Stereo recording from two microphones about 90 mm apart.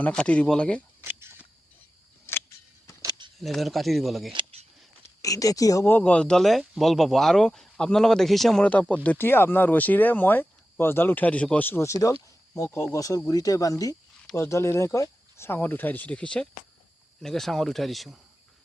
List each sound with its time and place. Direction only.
0.0 s speech: 10° left (ahead or behind)
1.0 s a sound: 25° right (ahead or behind)
3.0 s a sound: 55° right (ahead or behind)
3.3 s speech: centre (ahead or behind)
5.2 s speech: 40° left (ahead or behind)
5.8 s speech: 20° left (ahead or behind); by 8.6 s centre (ahead or behind)
8.6 s speech: 15° left (ahead or behind)